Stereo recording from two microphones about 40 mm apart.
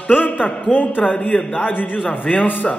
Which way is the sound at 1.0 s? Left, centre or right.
Left.